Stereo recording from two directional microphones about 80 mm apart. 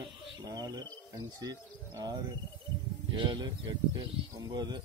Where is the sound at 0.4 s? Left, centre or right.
Right.